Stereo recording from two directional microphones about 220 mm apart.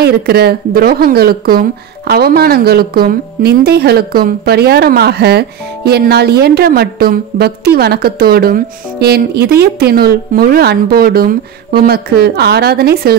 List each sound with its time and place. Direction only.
0.0 s speech: 45° right (ahead or behind)